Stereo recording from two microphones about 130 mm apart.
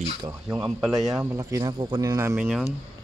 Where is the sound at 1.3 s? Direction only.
25° right (ahead or behind).